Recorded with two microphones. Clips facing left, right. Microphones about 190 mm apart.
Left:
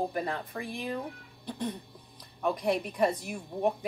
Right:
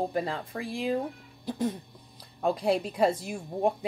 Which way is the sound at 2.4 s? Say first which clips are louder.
Right 3 dB; 30° right (ahead or behind).